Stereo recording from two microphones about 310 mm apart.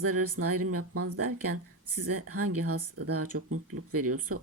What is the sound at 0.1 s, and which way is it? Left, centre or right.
Speech, right.